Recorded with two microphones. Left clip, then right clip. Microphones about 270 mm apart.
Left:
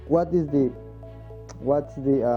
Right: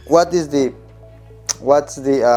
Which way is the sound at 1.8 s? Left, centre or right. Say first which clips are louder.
Right 9 dB; centre.